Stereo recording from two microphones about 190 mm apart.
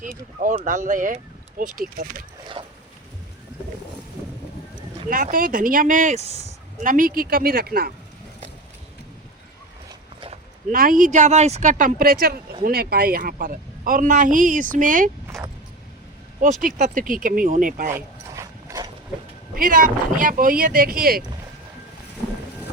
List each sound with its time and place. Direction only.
0.6 s speech: 40° right (ahead or behind)
2.6 s a sound: 30° right (ahead or behind)
5.0 s speech: 45° right (ahead or behind)
6.8 s speech: 45° right (ahead or behind)
10.7 s speech: 45° right (ahead or behind)
16.4 s speech: 45° right (ahead or behind)
17.9 s mechanisms: 15° right (ahead or behind)
19.5 s speech: 45° right (ahead or behind)